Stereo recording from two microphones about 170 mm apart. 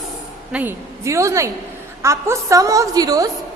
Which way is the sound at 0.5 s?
15° right (ahead or behind).